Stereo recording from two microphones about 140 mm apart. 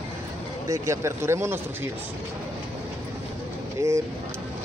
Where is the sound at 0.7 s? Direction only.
20° right (ahead or behind).